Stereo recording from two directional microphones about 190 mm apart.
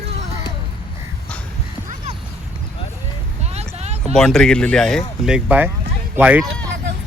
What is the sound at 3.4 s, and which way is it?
Vehicle, 35° right (ahead or behind).